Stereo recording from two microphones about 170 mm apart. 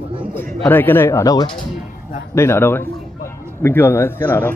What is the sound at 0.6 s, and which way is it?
A man's voice, 10° left (ahead or behind).